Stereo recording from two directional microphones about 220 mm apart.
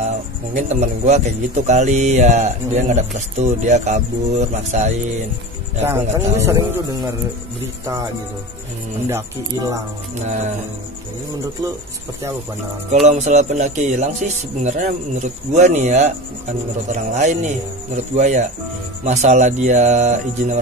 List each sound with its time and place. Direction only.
0.6 s speech: 30° right (ahead or behind)
6.1 s a man's voice: 15° right (ahead or behind)
9.1 s a man's voice: 15° right (ahead or behind)
10.1 s speech: 30° right (ahead or behind)
13.0 s speech: 30° right (ahead or behind)